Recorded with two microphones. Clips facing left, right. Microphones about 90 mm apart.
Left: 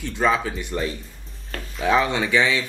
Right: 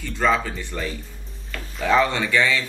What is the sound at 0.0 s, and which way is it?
Speech, 15° left (ahead or behind).